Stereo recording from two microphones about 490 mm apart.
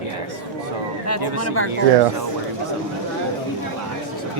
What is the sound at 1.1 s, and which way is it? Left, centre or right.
Speech, left.